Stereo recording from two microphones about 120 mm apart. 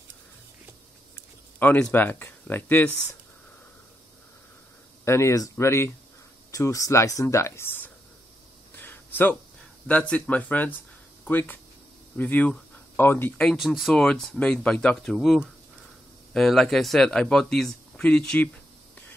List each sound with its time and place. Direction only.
1.6 s speech: 15° left (ahead or behind)
5.0 s speech: 20° left (ahead or behind)
8.7 s a sound: 15° left (ahead or behind)
9.8 s speech: 10° left (ahead or behind)
13.4 s speech: 5° left (ahead or behind)